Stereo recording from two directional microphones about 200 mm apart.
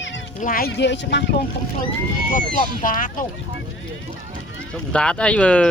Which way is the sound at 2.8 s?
40° left (ahead or behind).